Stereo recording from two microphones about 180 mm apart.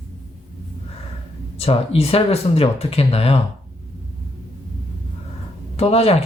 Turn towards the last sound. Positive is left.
turn(degrees=35)  # may be behind; listen again after turning